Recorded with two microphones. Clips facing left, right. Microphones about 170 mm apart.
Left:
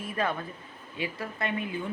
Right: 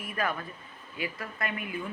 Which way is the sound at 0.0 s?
25° left (ahead or behind).